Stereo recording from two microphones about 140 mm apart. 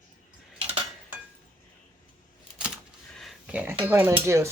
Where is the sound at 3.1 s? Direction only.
Centre (ahead or behind).